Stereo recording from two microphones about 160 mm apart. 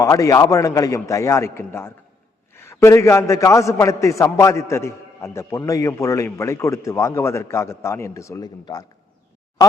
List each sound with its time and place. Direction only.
0.0 s a man's voice: 20° left (ahead or behind)